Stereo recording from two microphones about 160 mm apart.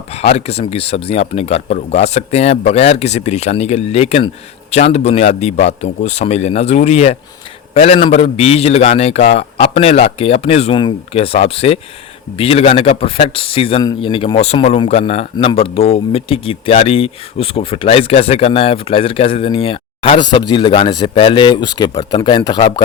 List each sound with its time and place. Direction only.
0.1 s a man's voice: 40° left (ahead or behind)